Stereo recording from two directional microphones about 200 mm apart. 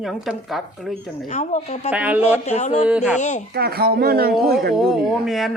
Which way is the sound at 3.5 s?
50° right (ahead or behind).